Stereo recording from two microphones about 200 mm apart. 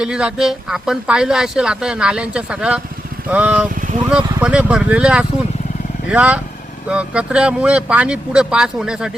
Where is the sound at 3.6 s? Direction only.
45° right (ahead or behind).